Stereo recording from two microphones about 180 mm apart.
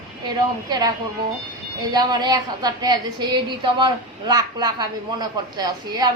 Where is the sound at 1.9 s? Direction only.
20° right (ahead or behind).